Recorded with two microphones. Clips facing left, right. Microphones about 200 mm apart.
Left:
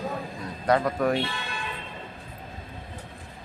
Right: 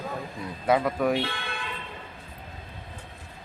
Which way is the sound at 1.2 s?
60° right (ahead or behind).